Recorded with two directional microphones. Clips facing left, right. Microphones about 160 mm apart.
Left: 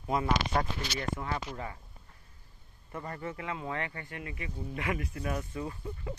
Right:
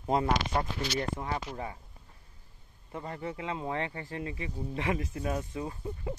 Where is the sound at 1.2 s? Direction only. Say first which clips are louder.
Right 1 dB; 15° right (ahead or behind).